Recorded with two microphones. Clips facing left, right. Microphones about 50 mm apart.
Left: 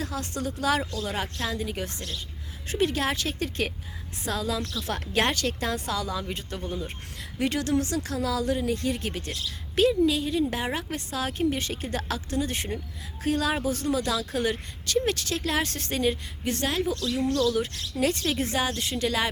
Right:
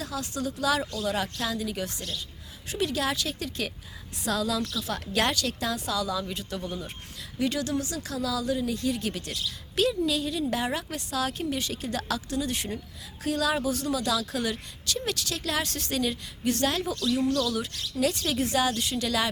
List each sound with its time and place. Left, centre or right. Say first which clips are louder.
0.0 s speech: left 1 dB; left
1.0 s speech: right 1 dB; left
4.3 s a woman's voice: right 1 dB; left
4.8 s speech: left 4 dB; left
7.3 s a woman's voice: left 2 dB; left
17.3 s speech: left 3 dB; left